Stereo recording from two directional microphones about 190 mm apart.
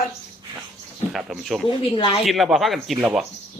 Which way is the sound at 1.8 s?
25° left (ahead or behind).